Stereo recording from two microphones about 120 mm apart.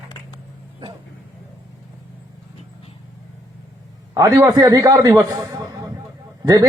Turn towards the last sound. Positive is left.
turn(degrees=-30)  # may be behind; listen again after turning